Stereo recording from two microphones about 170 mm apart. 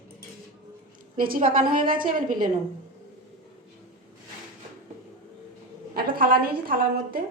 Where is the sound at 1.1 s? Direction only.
55° right (ahead or behind).